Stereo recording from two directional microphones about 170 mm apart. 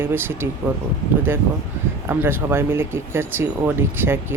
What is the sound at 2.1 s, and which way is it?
Speech, 15° right (ahead or behind).